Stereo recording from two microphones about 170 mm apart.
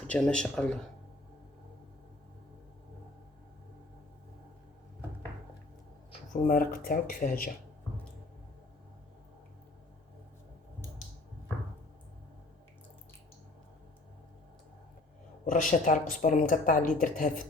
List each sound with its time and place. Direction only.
0.1 s speech: 5° left (ahead or behind)
6.3 s speech: 55° left (ahead or behind)
15.6 s a woman's voice: 50° left (ahead or behind)